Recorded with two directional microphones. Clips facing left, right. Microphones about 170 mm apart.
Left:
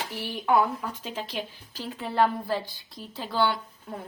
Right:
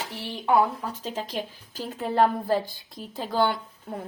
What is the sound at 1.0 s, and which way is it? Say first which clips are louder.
Speech: right 2 dB; 40° right (ahead or behind).